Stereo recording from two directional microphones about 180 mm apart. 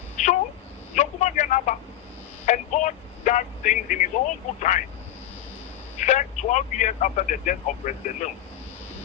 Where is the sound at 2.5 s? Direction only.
40° left (ahead or behind).